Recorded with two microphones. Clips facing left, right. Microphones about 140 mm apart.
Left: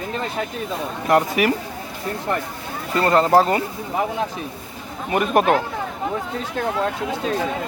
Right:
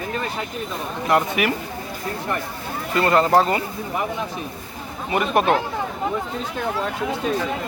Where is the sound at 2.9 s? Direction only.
35° left (ahead or behind).